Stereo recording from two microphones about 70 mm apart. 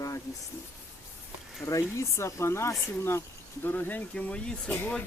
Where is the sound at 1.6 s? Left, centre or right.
Left.